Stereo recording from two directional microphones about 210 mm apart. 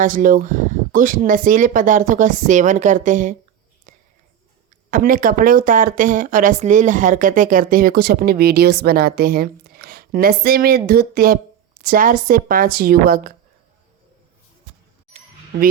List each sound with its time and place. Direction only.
0.0 s speech: 40° right (ahead or behind)
3.9 s a sound: 35° right (ahead or behind)
4.9 s speech: 40° right (ahead or behind)